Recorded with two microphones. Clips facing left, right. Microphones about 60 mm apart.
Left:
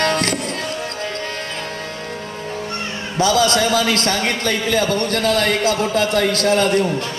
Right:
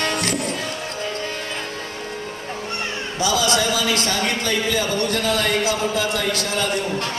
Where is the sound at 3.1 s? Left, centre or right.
Left.